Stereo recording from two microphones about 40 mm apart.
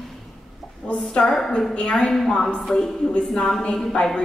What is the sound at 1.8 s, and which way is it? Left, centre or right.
Speech, left.